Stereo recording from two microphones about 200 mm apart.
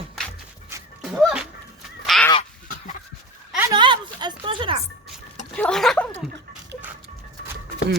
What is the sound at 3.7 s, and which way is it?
A woman's voice, 25° right (ahead or behind).